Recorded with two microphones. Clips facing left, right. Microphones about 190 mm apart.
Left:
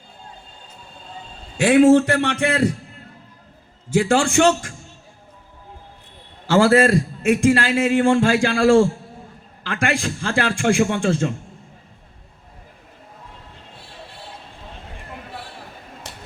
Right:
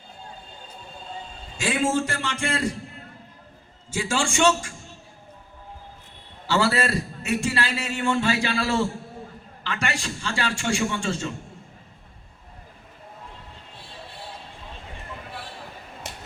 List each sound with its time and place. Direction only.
1.5 s a man's voice: 60° left (ahead or behind)
3.8 s a man's voice: 60° left (ahead or behind)
6.5 s a man's voice: 50° left (ahead or behind)